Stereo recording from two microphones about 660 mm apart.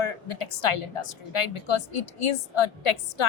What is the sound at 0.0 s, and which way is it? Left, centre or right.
A woman's voice, left.